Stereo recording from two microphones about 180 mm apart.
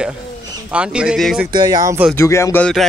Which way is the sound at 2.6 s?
Centre (ahead or behind).